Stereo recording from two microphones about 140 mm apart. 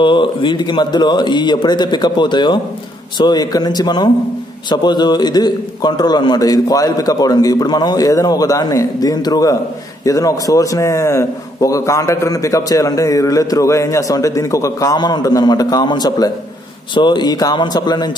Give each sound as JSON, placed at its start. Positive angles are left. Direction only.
{"t": 0.0, "sound": "a man's voice", "side_deg": 35}